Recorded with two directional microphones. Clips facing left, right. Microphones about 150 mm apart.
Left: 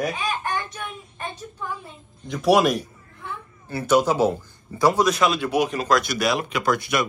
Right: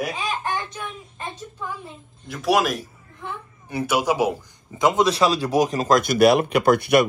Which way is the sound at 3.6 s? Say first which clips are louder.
Left 2 dB; 15° right (ahead or behind).